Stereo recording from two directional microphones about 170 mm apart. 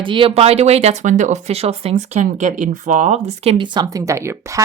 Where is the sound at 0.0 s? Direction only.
30° right (ahead or behind).